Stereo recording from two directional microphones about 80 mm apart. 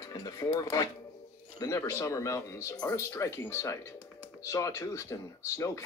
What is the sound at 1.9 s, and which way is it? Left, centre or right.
Speech, left.